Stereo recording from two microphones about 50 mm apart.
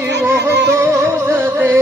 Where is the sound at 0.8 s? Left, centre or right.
Right.